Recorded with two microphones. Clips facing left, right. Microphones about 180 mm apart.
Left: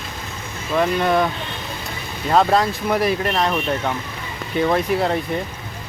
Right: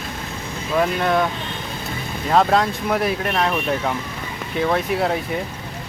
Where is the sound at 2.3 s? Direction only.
Centre (ahead or behind).